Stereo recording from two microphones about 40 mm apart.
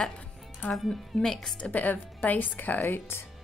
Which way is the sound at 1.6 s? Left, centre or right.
Left.